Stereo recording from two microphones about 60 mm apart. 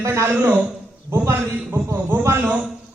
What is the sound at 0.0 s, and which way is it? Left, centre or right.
Speech, right.